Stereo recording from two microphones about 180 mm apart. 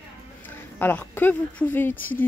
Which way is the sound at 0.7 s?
10° left (ahead or behind).